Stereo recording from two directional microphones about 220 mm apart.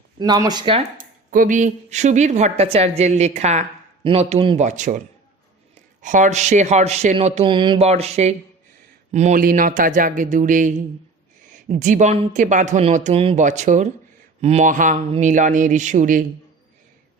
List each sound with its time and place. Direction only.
0.2 s speech: 15° right (ahead or behind)
1.3 s a woman's voice: 35° right (ahead or behind)